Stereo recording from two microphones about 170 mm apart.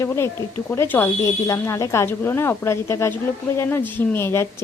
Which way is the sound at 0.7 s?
10° left (ahead or behind).